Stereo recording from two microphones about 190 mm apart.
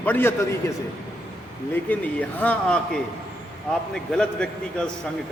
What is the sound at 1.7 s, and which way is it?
A man's voice, 10° left (ahead or behind).